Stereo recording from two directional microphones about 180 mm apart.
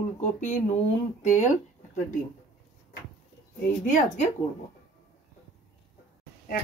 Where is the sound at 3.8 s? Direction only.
45° left (ahead or behind).